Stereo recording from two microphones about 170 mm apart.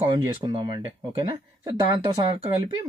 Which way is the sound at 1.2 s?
25° right (ahead or behind).